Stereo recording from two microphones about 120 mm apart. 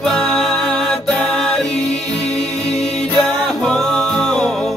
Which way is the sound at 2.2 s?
60° left (ahead or behind).